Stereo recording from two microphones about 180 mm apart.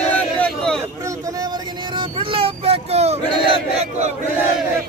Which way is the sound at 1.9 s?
30° right (ahead or behind).